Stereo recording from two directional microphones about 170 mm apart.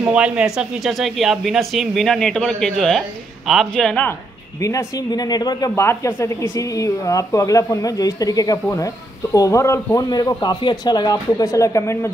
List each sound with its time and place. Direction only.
0.0 s speech: 5° right (ahead or behind)
4.6 s speech: 20° left (ahead or behind)